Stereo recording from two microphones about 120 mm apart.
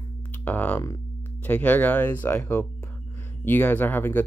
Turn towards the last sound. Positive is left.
turn(degrees=15)  # may be behind; listen again after turning